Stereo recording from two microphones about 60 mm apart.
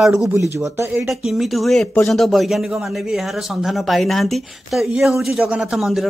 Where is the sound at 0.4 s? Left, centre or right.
Right.